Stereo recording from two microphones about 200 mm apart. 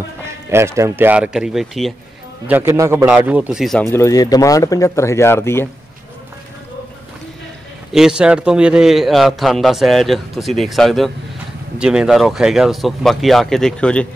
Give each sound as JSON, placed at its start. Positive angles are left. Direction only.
{"t": 0.3, "sound": "speech", "side_deg": -15}
{"t": 2.4, "sound": "a man's voice", "side_deg": -10}
{"t": 3.9, "sound": "speech", "side_deg": 15}
{"t": 7.9, "sound": "a man's voice", "side_deg": -5}